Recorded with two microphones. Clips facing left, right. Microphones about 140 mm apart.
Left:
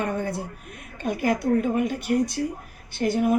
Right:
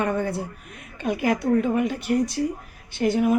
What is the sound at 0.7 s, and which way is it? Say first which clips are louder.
Speech: right 2 dB; 50° left (ahead or behind).